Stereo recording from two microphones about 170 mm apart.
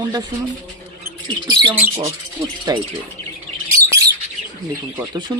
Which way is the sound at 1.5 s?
25° right (ahead or behind).